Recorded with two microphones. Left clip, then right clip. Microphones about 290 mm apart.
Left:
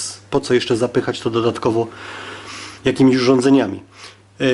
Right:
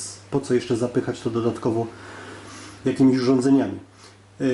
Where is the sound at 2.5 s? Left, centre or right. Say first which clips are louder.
Left 6 dB; centre.